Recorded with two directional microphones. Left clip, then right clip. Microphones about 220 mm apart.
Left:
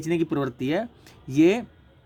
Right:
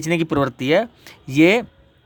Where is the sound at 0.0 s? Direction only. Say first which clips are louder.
Right 6 dB; 35° right (ahead or behind).